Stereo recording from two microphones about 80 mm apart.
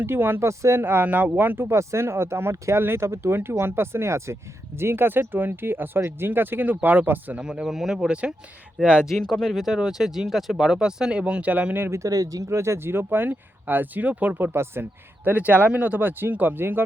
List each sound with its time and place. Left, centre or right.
0.0 s speech: right
0.8 s speech: right
7.4 s speech: centre
11.9 s speech: right